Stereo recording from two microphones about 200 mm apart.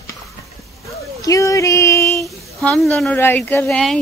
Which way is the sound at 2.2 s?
5° left (ahead or behind).